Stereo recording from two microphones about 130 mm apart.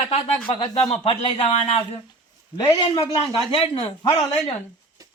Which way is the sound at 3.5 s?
50° left (ahead or behind).